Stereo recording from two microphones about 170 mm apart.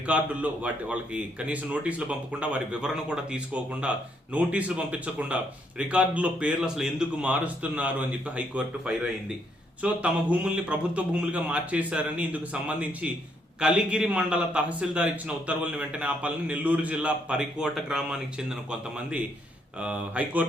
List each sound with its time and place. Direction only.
0.0 s a man's voice: 10° right (ahead or behind)